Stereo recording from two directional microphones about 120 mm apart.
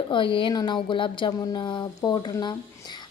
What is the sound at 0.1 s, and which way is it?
A woman's voice, 45° left (ahead or behind).